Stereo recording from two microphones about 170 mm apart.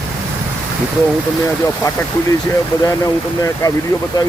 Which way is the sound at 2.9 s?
20° left (ahead or behind).